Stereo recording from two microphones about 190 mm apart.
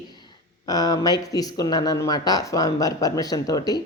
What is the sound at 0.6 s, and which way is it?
A woman's voice, 20° left (ahead or behind).